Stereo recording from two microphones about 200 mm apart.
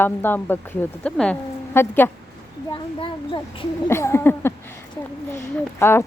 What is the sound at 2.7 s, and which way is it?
Speech, 25° left (ahead or behind).